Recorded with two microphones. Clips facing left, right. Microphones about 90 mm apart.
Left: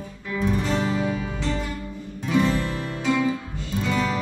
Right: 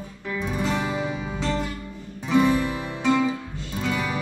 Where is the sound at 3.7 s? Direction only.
5° right (ahead or behind).